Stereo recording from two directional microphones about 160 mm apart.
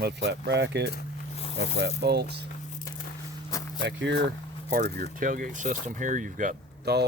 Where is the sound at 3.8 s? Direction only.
90° right; by 6.6 s 55° right (ahead or behind).